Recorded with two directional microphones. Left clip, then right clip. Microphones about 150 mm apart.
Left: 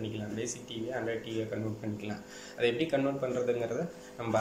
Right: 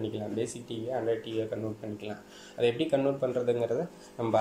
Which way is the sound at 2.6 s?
20° right (ahead or behind).